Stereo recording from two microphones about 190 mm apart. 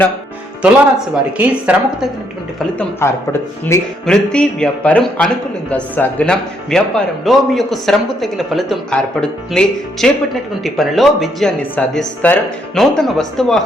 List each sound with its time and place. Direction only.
0.6 s speech: 5° right (ahead or behind)
2.6 s speech: 5° left (ahead or behind)
4.0 s speech: 5° left (ahead or behind)